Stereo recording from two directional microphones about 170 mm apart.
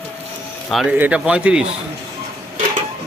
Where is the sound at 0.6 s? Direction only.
Centre (ahead or behind).